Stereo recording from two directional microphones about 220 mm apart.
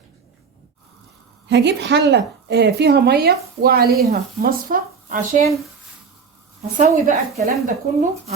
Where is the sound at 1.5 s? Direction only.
50° right (ahead or behind).